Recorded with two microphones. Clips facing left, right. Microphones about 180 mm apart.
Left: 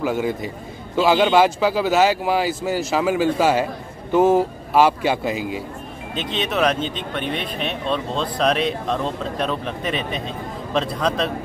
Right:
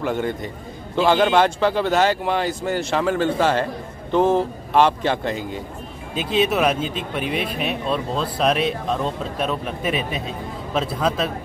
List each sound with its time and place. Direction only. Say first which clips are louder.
0.0 s a man's voice: left 1 dB; 5° left (ahead or behind)
6.1 s speech: right 3 dB; 5° right (ahead or behind)